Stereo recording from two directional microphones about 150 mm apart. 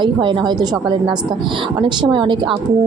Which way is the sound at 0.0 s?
30° right (ahead or behind).